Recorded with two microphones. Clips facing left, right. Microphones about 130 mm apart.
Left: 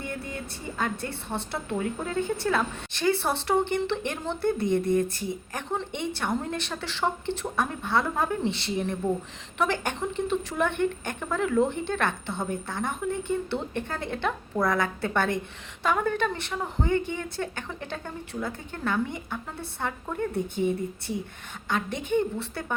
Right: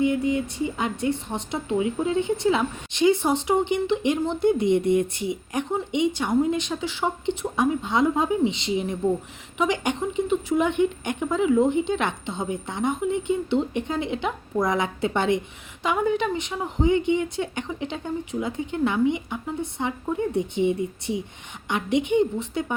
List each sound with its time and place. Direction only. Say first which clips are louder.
0.0 s a woman's voice: right 13 dB; 15° right (ahead or behind)